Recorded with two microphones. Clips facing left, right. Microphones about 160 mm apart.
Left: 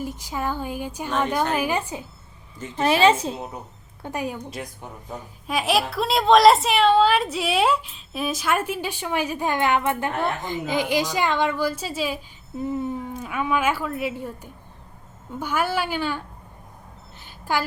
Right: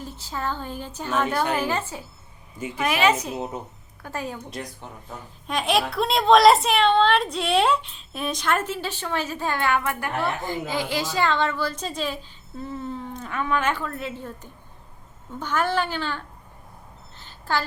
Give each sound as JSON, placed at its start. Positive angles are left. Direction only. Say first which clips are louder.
{"t": 0.0, "sound": "a woman's voice", "louder": "left 3 dB", "side_deg": 15}
{"t": 2.7, "sound": "a woman's voice", "louder": "left 4 dB", "side_deg": 30}
{"t": 4.0, "sound": "a woman's voice", "louder": "left 3 dB", "side_deg": 15}
{"t": 5.5, "sound": "a woman's voice", "louder": "left 1 dB", "side_deg": 5}
{"t": 17.2, "sound": "a sound", "louder": "left 1 dB", "side_deg": 10}